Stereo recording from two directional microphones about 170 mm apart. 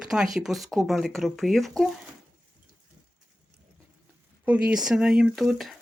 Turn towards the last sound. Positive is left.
turn(degrees=0)  # may be behind; listen again after turning